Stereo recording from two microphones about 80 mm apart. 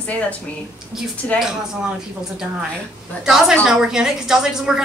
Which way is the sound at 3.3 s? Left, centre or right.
Centre.